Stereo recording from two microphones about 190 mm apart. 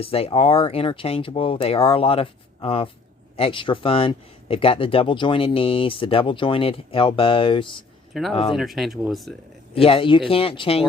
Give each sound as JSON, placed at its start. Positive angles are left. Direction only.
{"t": 0.0, "sound": "speech", "side_deg": 30}
{"t": 8.1, "sound": "speech", "side_deg": 0}
{"t": 9.7, "sound": "speech", "side_deg": 30}